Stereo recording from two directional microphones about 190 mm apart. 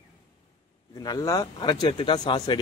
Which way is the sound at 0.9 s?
20° left (ahead or behind).